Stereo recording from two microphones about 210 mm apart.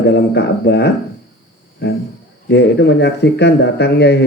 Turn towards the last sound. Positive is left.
turn(degrees=55)  # may be behind; listen again after turning